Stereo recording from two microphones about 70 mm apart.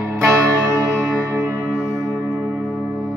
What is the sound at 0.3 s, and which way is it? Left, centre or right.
Music, right.